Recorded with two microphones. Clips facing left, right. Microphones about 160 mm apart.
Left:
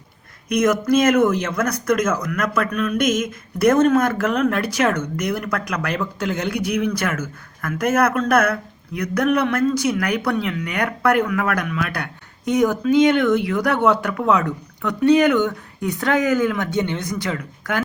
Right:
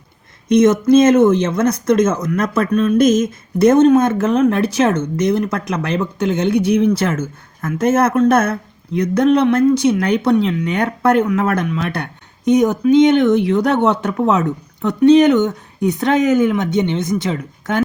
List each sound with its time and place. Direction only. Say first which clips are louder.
0.4 s speech: right 6 dB; 25° right (ahead or behind)